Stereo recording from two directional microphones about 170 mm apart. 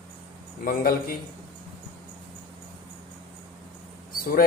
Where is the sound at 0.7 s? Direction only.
60° left (ahead or behind).